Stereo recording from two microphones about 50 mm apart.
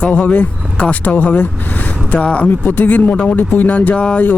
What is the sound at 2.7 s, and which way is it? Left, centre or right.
Speech, left.